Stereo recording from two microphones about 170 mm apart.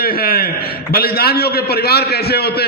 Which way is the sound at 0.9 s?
65° left (ahead or behind).